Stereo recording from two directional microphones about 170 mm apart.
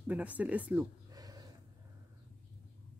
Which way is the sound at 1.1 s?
20° right (ahead or behind).